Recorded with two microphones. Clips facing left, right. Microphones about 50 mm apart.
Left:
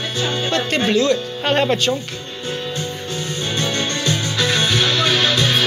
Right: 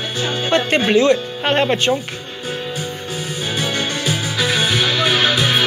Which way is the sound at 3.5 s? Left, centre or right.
Centre.